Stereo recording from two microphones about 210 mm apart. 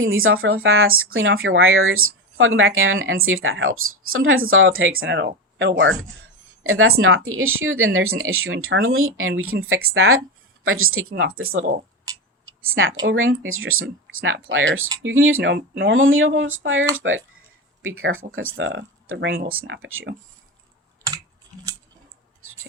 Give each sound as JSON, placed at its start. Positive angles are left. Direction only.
{"t": 0.0, "sound": "speech", "side_deg": -75}
{"t": 6.6, "sound": "speech", "side_deg": -80}
{"t": 12.6, "sound": "speech", "side_deg": -75}
{"t": 19.5, "sound": "speech", "side_deg": -65}